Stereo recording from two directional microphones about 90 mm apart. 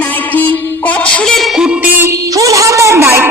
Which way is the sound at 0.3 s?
20° left (ahead or behind).